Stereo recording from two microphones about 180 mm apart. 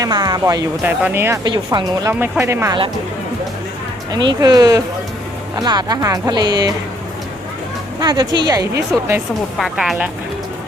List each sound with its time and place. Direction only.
0.0 s speech: 20° right (ahead or behind)
0.8 s speech: 10° right (ahead or behind)
1.5 s speech: 25° right (ahead or behind)
2.1 s speech: 10° right (ahead or behind)
4.1 s speech: 25° right (ahead or behind)
8.0 s speech: 20° right (ahead or behind)
9.6 s speech: centre (ahead or behind)